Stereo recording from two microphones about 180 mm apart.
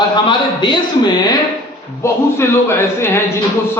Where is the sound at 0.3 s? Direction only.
25° left (ahead or behind).